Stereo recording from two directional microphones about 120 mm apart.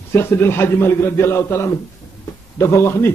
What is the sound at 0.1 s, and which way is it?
A man's voice, 20° left (ahead or behind).